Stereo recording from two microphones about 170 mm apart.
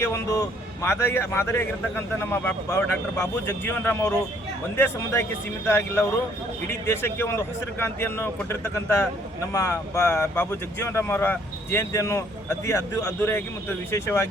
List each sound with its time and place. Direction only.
0.0 s a man's voice: 15° left (ahead or behind)
5.6 s a man's voice: 15° left (ahead or behind)